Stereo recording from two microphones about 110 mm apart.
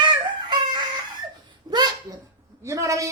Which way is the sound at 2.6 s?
30° right (ahead or behind).